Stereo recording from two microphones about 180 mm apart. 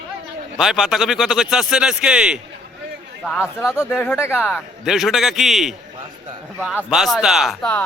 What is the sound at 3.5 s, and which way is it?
Speech, 10° left (ahead or behind).